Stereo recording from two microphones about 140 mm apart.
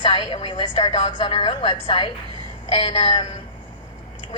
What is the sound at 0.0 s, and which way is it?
A woman's voice, 35° left (ahead or behind).